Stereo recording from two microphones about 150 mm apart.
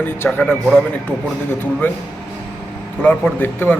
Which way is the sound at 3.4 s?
15° left (ahead or behind).